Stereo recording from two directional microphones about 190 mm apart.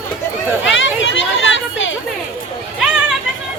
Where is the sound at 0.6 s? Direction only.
80° left.